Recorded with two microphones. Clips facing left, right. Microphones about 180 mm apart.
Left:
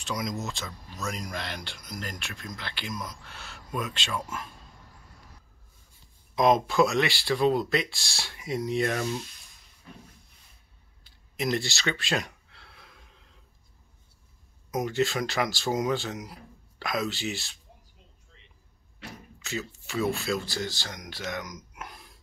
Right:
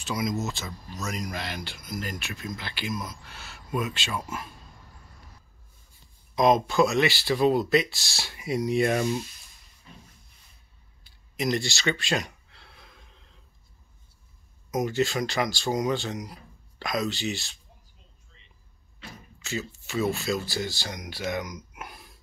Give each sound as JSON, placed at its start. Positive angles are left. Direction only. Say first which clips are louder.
{"t": 0.0, "sound": "speech", "louder": "right 3 dB", "side_deg": -5}
{"t": 6.3, "sound": "speech", "louder": "right 1 dB", "side_deg": 0}
{"t": 9.9, "sound": "a sound", "louder": "left 3 dB", "side_deg": 55}
{"t": 11.3, "sound": "a sound", "louder": "right 1 dB", "side_deg": 0}
{"t": 14.7, "sound": "speech", "louder": "right 1 dB", "side_deg": 0}
{"t": 19.4, "sound": "speech", "louder": "right 2 dB", "side_deg": 0}
{"t": 21.7, "sound": "burping", "louder": "right 1 dB", "side_deg": -10}